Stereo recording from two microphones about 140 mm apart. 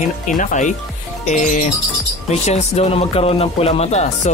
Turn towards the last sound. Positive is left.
turn(degrees=50)  # may be behind; listen again after turning